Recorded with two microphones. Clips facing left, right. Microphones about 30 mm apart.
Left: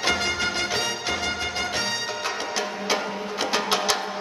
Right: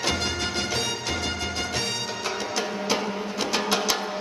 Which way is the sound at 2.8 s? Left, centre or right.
Centre.